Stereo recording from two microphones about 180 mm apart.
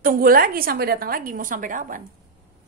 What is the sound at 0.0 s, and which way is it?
A woman's voice, 55° right (ahead or behind).